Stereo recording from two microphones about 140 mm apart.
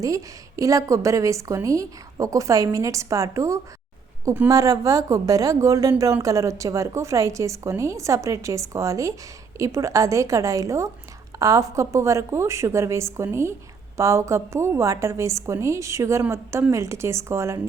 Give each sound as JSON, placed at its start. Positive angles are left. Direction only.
{"t": 0.0, "sound": "a woman's voice", "side_deg": -25}